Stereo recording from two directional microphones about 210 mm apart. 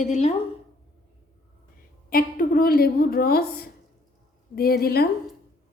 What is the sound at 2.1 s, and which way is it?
A woman's voice, 45° left (ahead or behind).